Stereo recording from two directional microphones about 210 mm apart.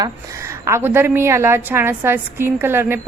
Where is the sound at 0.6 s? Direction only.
10° right (ahead or behind).